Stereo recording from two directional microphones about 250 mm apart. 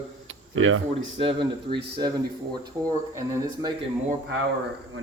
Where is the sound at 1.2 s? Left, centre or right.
Centre.